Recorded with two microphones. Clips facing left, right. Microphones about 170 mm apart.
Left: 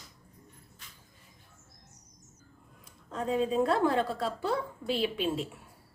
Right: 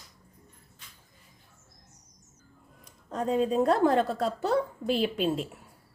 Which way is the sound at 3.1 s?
40° right (ahead or behind).